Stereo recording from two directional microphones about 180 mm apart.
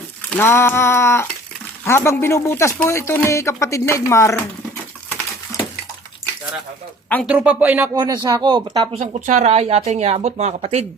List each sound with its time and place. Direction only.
0.3 s speech: 10° left (ahead or behind)
7.3 s speech: 10° right (ahead or behind)
7.9 s speech: 20° right (ahead or behind)
8.9 s speech: 40° right (ahead or behind)